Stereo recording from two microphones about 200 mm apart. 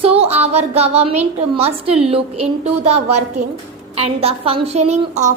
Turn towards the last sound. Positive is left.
turn(degrees=-35)  # may be behind; listen again after turning